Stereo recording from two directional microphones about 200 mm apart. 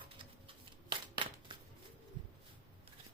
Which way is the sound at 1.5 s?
25° right (ahead or behind).